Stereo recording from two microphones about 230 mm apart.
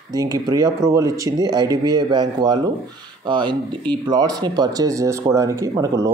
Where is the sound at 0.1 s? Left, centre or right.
Centre.